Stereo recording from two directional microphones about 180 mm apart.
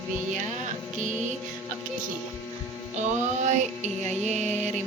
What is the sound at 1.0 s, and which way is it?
Speech, 45° right (ahead or behind).